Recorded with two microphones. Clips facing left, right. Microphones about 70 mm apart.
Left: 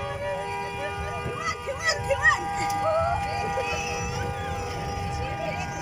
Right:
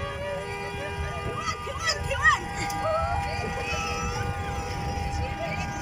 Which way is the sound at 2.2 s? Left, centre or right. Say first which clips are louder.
Right 1 dB; left.